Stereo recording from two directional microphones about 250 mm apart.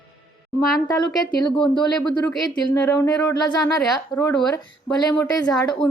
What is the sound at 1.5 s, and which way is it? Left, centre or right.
Speech, centre.